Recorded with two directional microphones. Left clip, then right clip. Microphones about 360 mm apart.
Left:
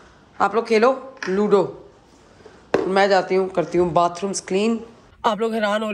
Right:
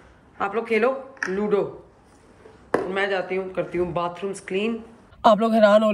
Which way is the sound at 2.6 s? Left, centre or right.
Centre.